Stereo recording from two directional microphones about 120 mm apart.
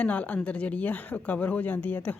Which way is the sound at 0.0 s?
10° left (ahead or behind).